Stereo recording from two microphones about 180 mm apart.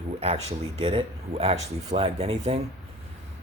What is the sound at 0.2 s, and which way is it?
Speech, 35° right (ahead or behind).